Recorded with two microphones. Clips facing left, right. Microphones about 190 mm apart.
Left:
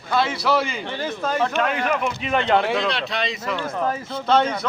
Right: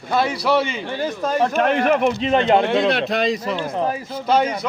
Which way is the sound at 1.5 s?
45° right (ahead or behind).